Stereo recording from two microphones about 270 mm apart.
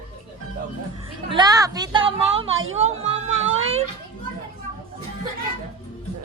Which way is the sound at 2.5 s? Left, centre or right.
Right.